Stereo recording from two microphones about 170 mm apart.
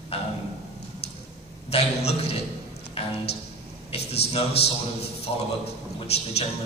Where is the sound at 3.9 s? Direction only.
35° left (ahead or behind).